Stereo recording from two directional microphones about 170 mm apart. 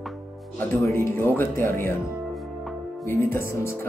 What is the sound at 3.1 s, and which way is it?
Speech, 15° left (ahead or behind).